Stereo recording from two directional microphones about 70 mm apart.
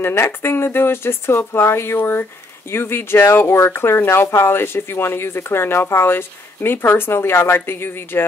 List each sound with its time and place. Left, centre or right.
0.0 s speech: left